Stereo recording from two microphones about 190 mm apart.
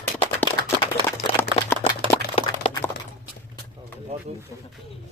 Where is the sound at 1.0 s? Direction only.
10° left (ahead or behind).